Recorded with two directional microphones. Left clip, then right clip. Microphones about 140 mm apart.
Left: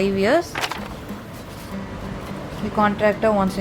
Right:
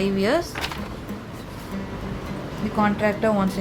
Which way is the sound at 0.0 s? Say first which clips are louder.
Left 3 dB; 30° left (ahead or behind).